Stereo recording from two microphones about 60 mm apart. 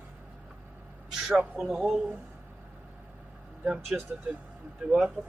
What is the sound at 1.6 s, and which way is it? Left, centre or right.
Speech, centre.